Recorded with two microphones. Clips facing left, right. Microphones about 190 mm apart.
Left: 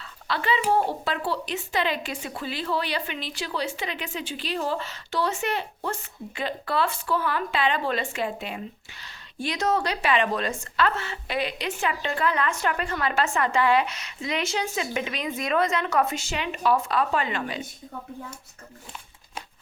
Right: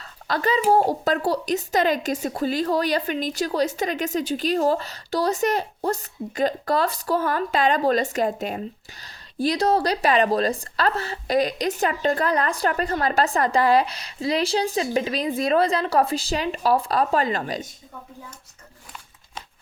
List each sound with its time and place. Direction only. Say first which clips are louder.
0.0 s a woman's voice: right 5 dB; 40° right (ahead or behind)